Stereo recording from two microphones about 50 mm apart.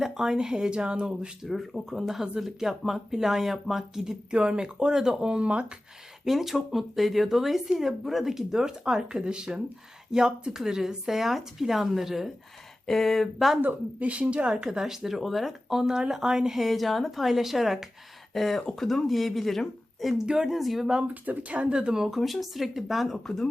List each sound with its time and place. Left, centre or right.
0.0 s speech: centre
1.5 s speech: centre; by 5.7 s right
6.2 s speech: centre
12.8 s speech: centre
13.6 s speech: right; by 20.2 s centre
20.2 s speech: centre
20.6 s speech: centre
21.1 s speech: right
22.0 s speech: centre
23.1 s speech: centre